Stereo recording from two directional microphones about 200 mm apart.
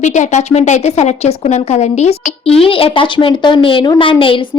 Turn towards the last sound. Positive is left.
turn(degrees=25)  # may be behind; listen again after turning